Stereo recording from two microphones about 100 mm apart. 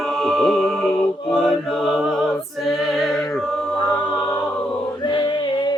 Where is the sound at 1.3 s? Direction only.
Centre (ahead or behind).